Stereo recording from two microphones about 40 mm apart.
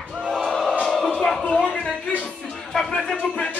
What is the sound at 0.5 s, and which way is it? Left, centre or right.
Music, centre.